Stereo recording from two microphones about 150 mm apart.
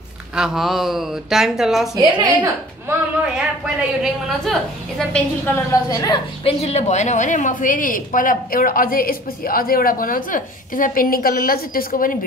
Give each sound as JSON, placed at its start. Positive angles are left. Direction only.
{"t": 0.4, "sound": "a woman's voice", "side_deg": 0}
{"t": 2.0, "sound": "a woman's voice", "side_deg": -25}
{"t": 2.3, "sound": "a woman's voice", "side_deg": -15}
{"t": 5.5, "sound": "a woman's voice", "side_deg": 20}
{"t": 6.4, "sound": "a woman's voice", "side_deg": 45}